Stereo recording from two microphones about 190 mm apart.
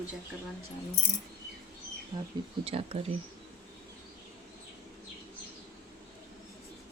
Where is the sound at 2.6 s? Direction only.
30° right (ahead or behind).